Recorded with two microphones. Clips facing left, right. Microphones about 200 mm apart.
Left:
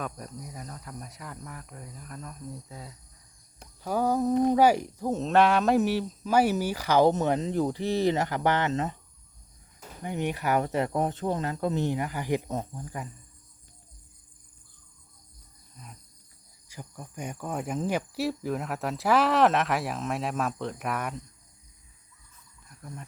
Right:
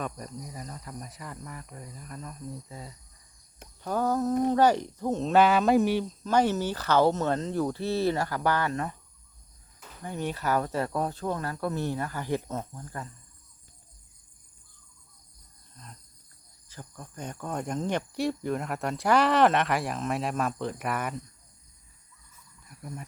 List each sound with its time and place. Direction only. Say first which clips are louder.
0.0 s speech: right 1 dB; centre (ahead or behind); by 9.0 s 20° left (ahead or behind)
10.0 s speech: left 2 dB; 20° left (ahead or behind)
15.8 s speech: left 1 dB; 10° left (ahead or behind)
22.7 s cricket: right 3 dB; 10° right (ahead or behind)